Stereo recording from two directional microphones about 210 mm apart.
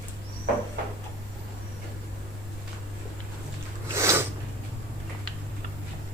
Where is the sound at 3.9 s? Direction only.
10° right (ahead or behind).